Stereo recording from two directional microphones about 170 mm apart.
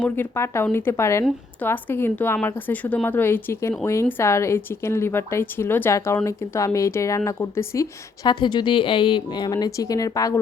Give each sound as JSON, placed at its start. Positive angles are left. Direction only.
{"t": 0.0, "sound": "a woman's voice", "side_deg": 15}